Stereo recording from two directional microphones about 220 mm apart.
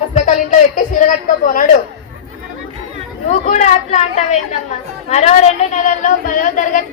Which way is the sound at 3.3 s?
30° left (ahead or behind).